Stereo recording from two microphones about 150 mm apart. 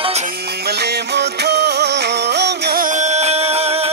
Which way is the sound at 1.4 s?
90° right.